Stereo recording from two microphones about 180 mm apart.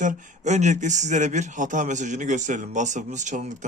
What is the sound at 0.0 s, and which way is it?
Speech, 45° right (ahead or behind).